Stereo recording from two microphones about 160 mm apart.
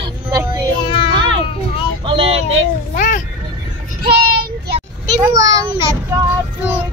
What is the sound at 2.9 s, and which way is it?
Vehicle, 50° left (ahead or behind).